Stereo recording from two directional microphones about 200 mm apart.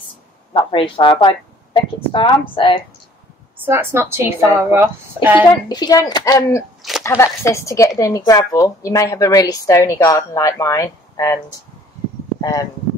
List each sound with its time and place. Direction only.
0.5 s speech: 25° left (ahead or behind)
3.5 s a woman's voice: 10° right (ahead or behind)
5.7 s a woman's voice: 20° left (ahead or behind)
12.4 s speech: 15° left (ahead or behind)